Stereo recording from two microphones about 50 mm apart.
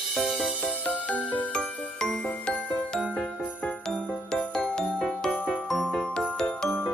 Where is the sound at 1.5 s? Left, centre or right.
Centre.